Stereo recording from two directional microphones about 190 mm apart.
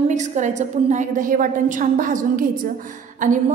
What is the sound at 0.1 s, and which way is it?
A woman's voice, 40° right (ahead or behind).